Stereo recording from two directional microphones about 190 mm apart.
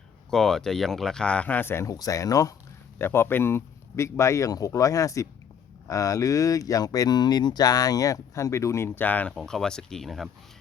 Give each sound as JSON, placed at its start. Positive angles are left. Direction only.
{"t": 0.3, "sound": "speech", "side_deg": 5}